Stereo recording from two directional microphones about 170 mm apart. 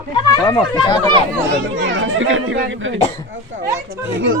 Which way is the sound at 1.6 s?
90° right.